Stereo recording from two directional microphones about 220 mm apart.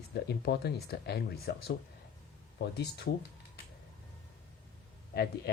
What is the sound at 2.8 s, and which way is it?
Speech, 45° left (ahead or behind).